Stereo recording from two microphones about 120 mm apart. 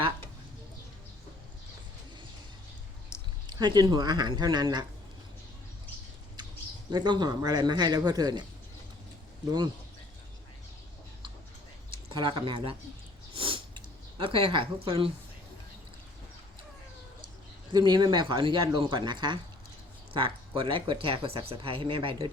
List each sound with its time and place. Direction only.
3.4 s speech: 40° right (ahead or behind)
6.9 s speech: 35° right (ahead or behind)
12.1 s speech: 45° right (ahead or behind)
13.3 s a sound: 50° right (ahead or behind)
17.7 s speech: 40° right (ahead or behind)